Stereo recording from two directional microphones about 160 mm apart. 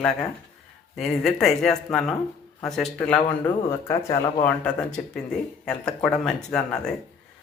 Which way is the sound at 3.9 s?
20° left (ahead or behind).